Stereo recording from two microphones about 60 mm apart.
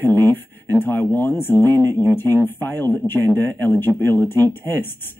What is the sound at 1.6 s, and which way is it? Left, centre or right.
Speech, right.